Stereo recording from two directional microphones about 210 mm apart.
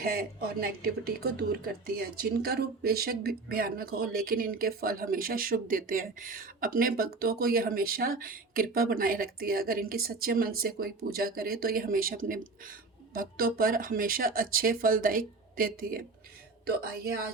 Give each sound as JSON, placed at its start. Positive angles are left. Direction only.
{"t": 0.0, "sound": "speech", "side_deg": -45}